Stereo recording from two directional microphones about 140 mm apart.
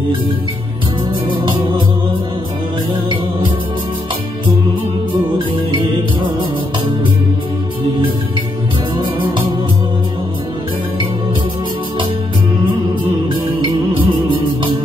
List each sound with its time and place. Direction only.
8.9 s music: 35° right (ahead or behind)
13.3 s music: 35° right (ahead or behind)